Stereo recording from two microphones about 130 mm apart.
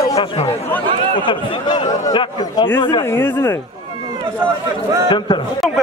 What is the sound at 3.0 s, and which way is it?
Speech, 15° left (ahead or behind).